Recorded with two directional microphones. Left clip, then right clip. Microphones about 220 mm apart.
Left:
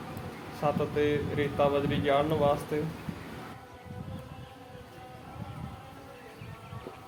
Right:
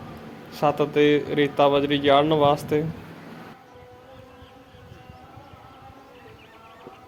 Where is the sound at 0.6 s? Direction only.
45° right (ahead or behind).